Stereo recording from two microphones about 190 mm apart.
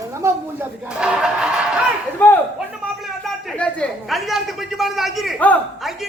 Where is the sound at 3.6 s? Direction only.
5° left (ahead or behind).